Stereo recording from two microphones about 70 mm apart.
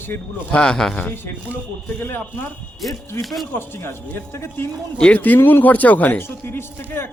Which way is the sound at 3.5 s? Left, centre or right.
Left.